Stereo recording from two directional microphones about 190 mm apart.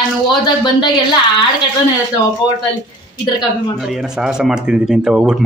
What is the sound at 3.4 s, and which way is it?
Speech, centre (ahead or behind).